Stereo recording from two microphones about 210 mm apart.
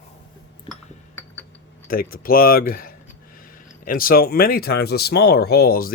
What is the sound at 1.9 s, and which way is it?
Speech, 45° left (ahead or behind).